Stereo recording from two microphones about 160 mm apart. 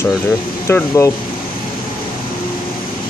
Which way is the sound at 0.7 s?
15° left (ahead or behind).